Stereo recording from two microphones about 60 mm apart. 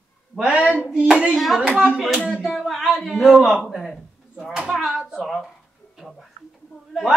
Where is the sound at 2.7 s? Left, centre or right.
Centre.